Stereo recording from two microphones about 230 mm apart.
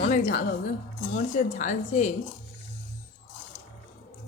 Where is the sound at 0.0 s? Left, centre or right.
Left.